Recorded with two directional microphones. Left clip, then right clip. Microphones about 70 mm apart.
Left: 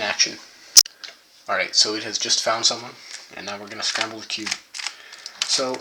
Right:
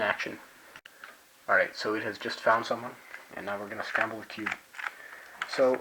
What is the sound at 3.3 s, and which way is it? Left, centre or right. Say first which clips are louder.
Speech: left 2 dB; centre.